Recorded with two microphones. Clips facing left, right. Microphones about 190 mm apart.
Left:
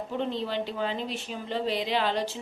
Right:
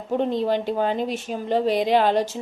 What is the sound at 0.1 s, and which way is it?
Speech, 45° right (ahead or behind).